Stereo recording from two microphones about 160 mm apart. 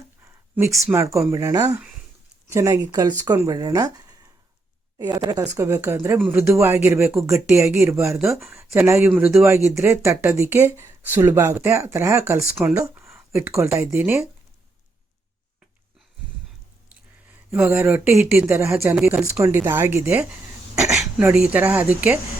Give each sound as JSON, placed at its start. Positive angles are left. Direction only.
{"t": 0.5, "sound": "speech", "side_deg": -15}
{"t": 17.5, "sound": "speech", "side_deg": -15}